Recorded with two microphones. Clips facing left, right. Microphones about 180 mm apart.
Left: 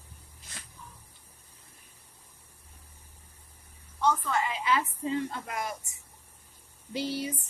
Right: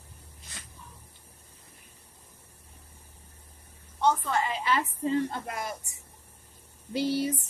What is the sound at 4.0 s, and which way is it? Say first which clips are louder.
A woman's voice: right 2 dB; 35° right (ahead or behind).